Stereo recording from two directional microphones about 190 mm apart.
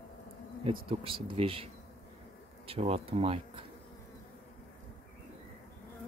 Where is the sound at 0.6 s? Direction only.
30° right (ahead or behind).